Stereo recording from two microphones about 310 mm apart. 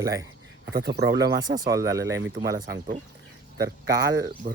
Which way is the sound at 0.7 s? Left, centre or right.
Right.